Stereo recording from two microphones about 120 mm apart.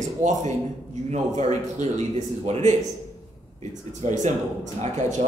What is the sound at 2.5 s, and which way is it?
Speech, 60° right (ahead or behind).